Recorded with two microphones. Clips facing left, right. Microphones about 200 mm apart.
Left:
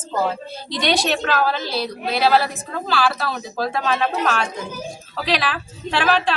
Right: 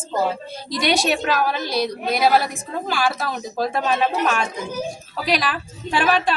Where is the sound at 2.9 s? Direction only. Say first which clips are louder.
Left 2 dB; 15° right (ahead or behind).